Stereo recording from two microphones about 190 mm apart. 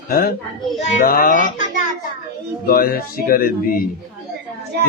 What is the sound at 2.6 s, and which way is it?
Speech, 50° left (ahead or behind).